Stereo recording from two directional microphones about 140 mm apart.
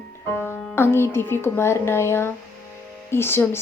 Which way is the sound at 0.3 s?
15° left (ahead or behind).